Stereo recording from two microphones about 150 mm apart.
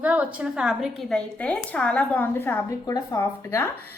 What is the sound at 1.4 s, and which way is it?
A woman's voice, 10° left (ahead or behind).